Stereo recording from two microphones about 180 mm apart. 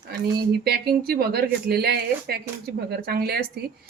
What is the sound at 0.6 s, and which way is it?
Speech, 60° right (ahead or behind).